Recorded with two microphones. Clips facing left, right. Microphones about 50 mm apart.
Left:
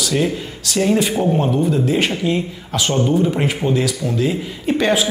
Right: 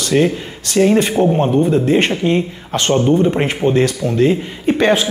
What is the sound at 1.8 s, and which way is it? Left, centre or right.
A man's voice, right.